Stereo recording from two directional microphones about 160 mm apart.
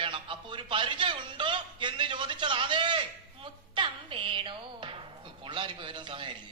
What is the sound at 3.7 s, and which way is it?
Music, 30° right (ahead or behind).